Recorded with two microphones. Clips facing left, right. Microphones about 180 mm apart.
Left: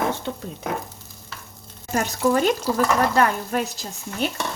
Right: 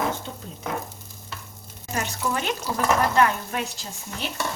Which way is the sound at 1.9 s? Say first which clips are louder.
Left 7 dB; 45° left (ahead or behind).